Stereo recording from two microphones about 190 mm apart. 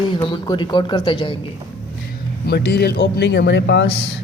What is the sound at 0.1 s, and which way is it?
Speech, 25° left (ahead or behind).